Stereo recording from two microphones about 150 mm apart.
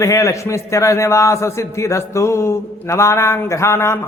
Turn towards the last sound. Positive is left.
turn(degrees=15)  # may be behind; listen again after turning